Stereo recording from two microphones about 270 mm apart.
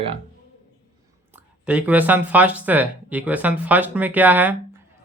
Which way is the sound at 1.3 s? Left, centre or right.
Centre.